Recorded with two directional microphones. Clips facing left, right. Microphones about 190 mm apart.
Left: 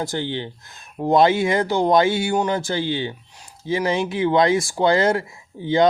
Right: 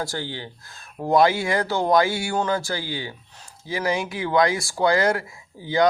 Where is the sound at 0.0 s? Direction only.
20° left (ahead or behind).